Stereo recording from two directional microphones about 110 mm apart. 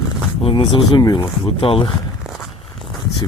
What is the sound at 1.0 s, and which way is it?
Speech, 40° left (ahead or behind).